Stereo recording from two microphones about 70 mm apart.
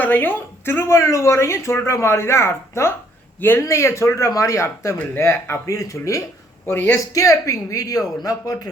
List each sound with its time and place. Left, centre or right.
0.0 s a woman's voice: left
0.9 s speech: left